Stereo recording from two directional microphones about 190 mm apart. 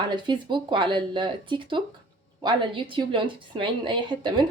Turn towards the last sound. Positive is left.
turn(degrees=-25)  # may be behind; listen again after turning